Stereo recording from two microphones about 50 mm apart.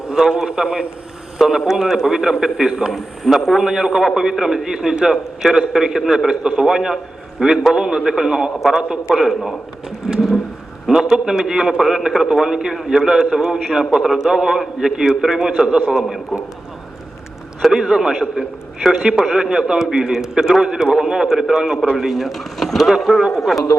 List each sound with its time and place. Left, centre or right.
0.1 s a man's voice: centre
8.8 s a man's voice: right
9.1 s speech: centre
10.8 s a man's voice: centre
17.7 s a man's voice: centre
19.3 s a man's voice: centre